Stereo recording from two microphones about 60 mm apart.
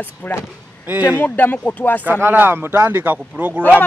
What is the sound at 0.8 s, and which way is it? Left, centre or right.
Speech, right.